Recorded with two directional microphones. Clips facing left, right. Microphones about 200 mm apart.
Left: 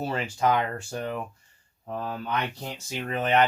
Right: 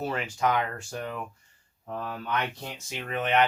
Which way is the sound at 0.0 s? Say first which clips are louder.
Left 2 dB; 30° left (ahead or behind).